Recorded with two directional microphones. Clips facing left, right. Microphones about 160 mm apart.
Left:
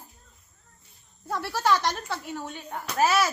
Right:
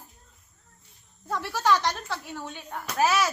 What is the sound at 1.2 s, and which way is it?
Speech, 10° left (ahead or behind).